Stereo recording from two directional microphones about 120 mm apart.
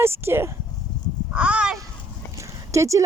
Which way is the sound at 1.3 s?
10° right (ahead or behind).